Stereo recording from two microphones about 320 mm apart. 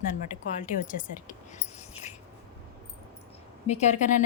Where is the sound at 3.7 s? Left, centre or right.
Left.